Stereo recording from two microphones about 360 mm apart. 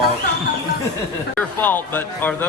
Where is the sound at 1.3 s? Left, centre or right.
Centre.